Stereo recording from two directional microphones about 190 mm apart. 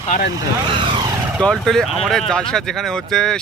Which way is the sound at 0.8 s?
25° right (ahead or behind).